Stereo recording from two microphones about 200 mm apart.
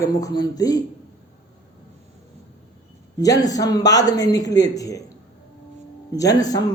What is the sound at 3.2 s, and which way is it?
A man's voice, 20° left (ahead or behind).